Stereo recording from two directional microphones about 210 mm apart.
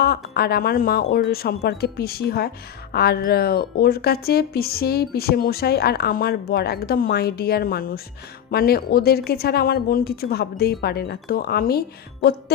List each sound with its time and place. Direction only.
0.0 s speech: 50° left (ahead or behind)